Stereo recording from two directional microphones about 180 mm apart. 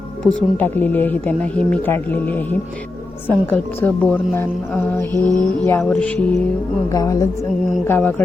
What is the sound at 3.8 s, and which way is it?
Speech, 10° left (ahead or behind).